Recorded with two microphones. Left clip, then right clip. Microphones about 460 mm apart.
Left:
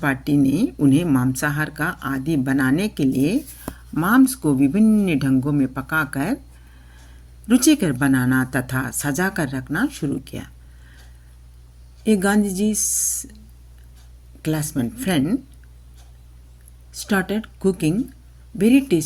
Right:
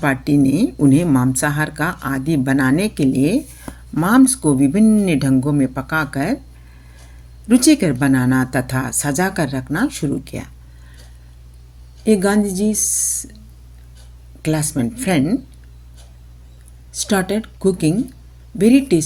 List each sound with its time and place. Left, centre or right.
0.0 s speech: left
7.4 s speech: left
12.0 s speech: left
14.4 s speech: left
16.9 s speech: left